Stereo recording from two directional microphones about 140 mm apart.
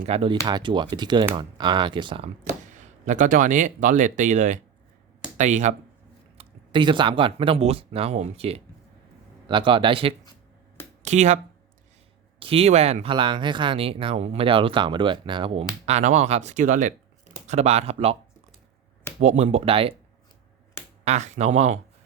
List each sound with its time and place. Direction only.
0.0 s speech: 45° right (ahead or behind)
2.4 s speech: 60° right (ahead or behind)
6.3 s speech: 40° right (ahead or behind)
11.0 s speech: 55° right (ahead or behind)
12.4 s speech: 45° right (ahead or behind); by 16.9 s 65° right (ahead or behind)
17.4 s speech: 50° right (ahead or behind)
19.2 s speech: 55° right (ahead or behind)
21.0 s speech: 55° right (ahead or behind)